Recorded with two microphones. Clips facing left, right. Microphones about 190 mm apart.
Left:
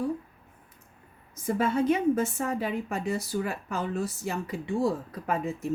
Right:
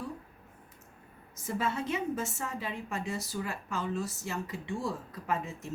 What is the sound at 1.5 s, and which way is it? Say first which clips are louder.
Speech: left 8 dB; 55° left (ahead or behind).